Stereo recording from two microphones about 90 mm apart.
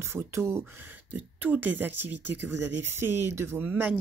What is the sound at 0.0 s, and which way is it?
Speech, 35° right (ahead or behind).